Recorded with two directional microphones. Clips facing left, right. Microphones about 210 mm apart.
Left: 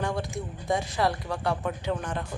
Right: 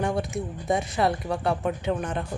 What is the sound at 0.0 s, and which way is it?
A woman's voice, 20° right (ahead or behind).